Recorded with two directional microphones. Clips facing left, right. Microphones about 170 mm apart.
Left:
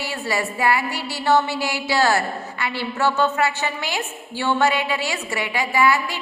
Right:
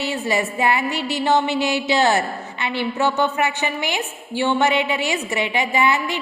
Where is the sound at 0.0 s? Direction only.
20° right (ahead or behind).